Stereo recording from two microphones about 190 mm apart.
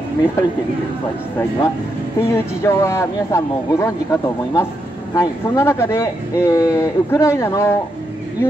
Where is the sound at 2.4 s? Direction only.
15° left (ahead or behind).